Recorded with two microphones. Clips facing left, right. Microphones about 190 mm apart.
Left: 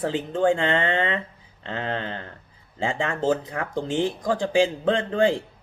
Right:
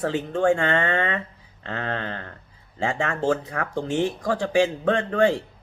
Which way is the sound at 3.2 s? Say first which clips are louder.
Left 1 dB; 20° left (ahead or behind).